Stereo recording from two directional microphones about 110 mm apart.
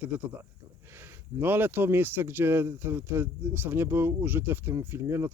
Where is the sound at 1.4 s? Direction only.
20° right (ahead or behind).